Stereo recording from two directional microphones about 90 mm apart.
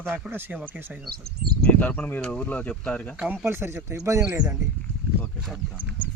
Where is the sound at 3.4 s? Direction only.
25° right (ahead or behind).